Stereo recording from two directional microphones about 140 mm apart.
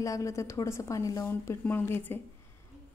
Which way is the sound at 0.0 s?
20° left (ahead or behind).